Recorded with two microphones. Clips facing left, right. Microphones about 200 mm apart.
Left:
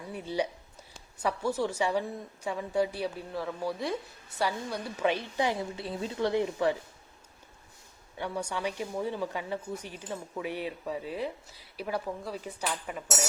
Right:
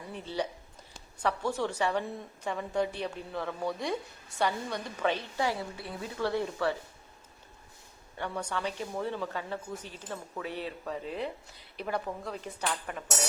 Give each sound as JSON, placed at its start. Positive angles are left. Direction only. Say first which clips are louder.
{"t": 0.1, "sound": "speech", "louder": "left 3 dB", "side_deg": 10}
{"t": 8.2, "sound": "speech", "louder": "left 1 dB", "side_deg": 10}